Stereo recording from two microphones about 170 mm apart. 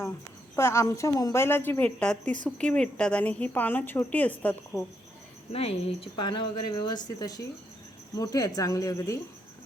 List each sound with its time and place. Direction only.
0.5 s a woman's voice: 15° left (ahead or behind)
5.5 s speech: 35° left (ahead or behind); by 9.1 s 20° left (ahead or behind)